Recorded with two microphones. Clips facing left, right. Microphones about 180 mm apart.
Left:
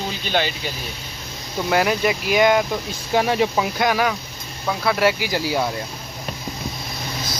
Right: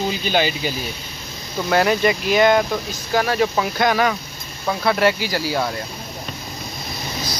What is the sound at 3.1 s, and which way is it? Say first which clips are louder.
Speech: even; 20° left (ahead or behind).